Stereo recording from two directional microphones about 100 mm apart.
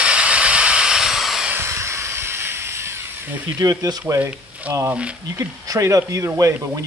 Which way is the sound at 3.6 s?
35° right (ahead or behind).